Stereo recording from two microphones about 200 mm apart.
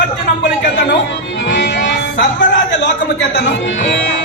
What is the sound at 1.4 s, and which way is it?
Music, 60° left (ahead or behind).